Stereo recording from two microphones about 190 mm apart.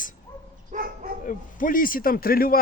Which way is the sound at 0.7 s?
45° right (ahead or behind).